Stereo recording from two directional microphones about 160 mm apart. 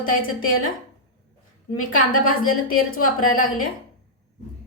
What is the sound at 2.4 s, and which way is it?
A woman's voice, 60° left (ahead or behind).